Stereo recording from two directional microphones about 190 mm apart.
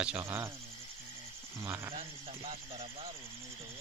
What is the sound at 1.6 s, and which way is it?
Speech, 15° right (ahead or behind).